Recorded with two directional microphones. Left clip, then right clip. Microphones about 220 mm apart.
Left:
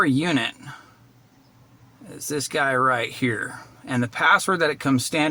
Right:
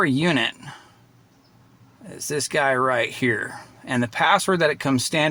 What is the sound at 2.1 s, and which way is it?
Speech, 35° right (ahead or behind).